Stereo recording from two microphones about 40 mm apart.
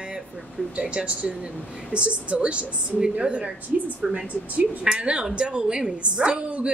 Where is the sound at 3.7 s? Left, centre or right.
Right.